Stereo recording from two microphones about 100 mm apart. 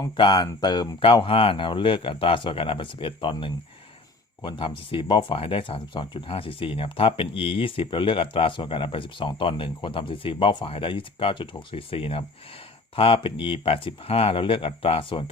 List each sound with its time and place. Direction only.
0.2 s speech: 45° left (ahead or behind)
0.9 s speech: 60° left (ahead or behind)
4.4 s speech: 55° left (ahead or behind)